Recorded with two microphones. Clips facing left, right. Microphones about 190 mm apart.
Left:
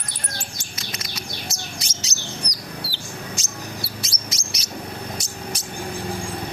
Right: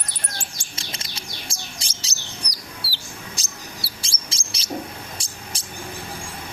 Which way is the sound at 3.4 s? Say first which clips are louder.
Left 5 dB; 35° right (ahead or behind).